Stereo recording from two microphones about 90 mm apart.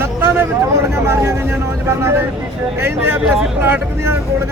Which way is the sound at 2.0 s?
30° right (ahead or behind).